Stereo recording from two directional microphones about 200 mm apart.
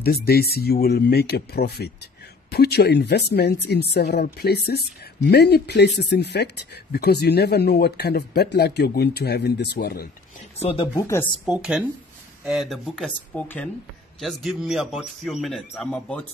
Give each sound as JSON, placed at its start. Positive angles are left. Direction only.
{"t": 0.0, "sound": "speech", "side_deg": 50}
{"t": 10.6, "sound": "speech", "side_deg": 30}
{"t": 11.0, "sound": "speech", "side_deg": 15}
{"t": 11.4, "sound": "a man's voice", "side_deg": -5}